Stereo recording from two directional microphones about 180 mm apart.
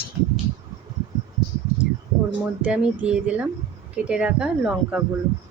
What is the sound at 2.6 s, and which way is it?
Speech, 5° right (ahead or behind).